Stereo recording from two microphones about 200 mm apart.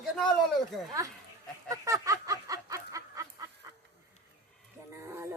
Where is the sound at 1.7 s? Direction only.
15° right (ahead or behind).